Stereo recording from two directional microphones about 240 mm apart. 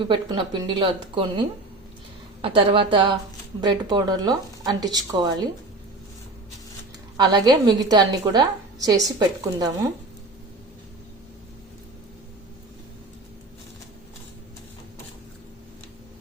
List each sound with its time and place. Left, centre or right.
0.0 s a woman's voice: right
7.2 s a woman's voice: centre